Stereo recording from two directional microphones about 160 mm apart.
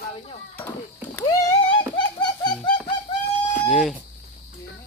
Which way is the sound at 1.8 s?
30° left (ahead or behind).